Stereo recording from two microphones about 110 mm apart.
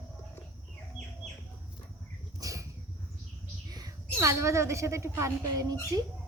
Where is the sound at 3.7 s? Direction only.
30° right (ahead or behind).